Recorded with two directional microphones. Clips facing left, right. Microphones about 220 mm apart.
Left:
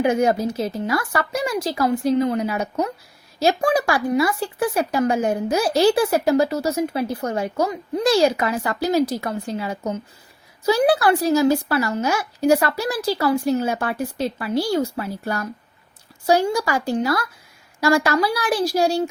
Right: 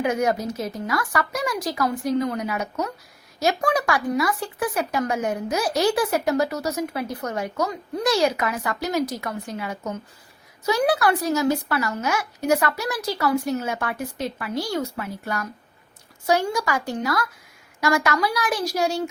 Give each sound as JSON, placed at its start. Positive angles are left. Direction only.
{"t": 0.0, "sound": "speech", "side_deg": 30}